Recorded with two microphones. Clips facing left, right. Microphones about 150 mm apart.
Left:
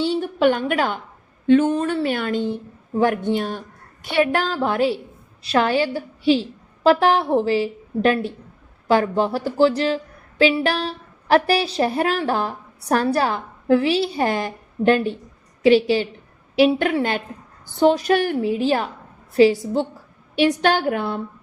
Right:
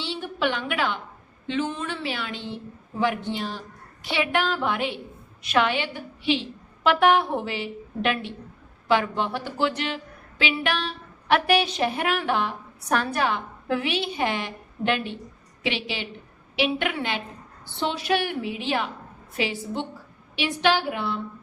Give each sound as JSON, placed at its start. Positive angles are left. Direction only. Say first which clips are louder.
{"t": 0.0, "sound": "a woman's voice", "louder": "left 9 dB", "side_deg": 45}